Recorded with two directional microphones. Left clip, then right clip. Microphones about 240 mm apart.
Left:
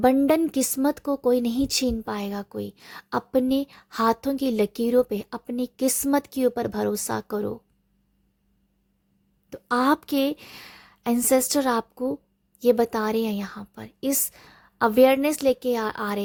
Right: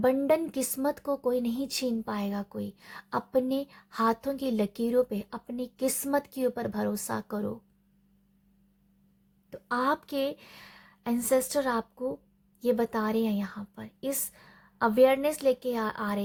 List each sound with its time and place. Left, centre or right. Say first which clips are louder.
0.0 s a woman's voice: left 5 dB; left
9.5 s a woman's voice: left 6 dB; left